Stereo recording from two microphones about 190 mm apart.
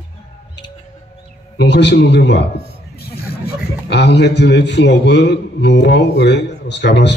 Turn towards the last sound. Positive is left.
turn(degrees=65)  # may be behind; listen again after turning